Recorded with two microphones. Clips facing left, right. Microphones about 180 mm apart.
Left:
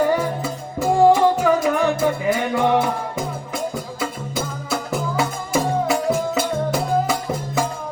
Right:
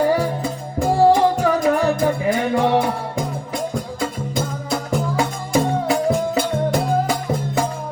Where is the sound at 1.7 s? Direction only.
35° right (ahead or behind).